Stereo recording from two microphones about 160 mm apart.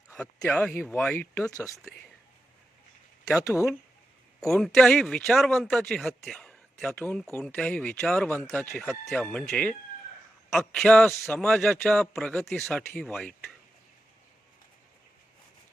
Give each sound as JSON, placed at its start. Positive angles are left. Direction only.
{"t": 0.3, "sound": "speech", "side_deg": 15}
{"t": 1.5, "sound": "speech", "side_deg": 20}
{"t": 3.3, "sound": "speech", "side_deg": 20}
{"t": 4.4, "sound": "speech", "side_deg": 0}